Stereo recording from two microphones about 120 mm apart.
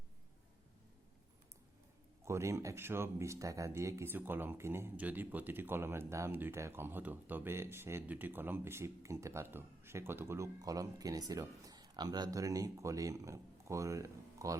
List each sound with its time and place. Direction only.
2.2 s speech: 25° right (ahead or behind)